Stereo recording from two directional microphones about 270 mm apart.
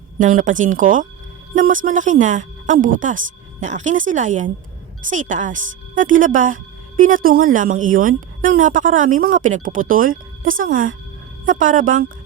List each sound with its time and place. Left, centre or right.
0.2 s a woman's voice: right